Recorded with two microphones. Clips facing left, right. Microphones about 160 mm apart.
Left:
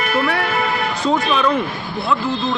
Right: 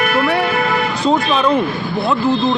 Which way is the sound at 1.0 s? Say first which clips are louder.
Right 2 dB; 25° right (ahead or behind).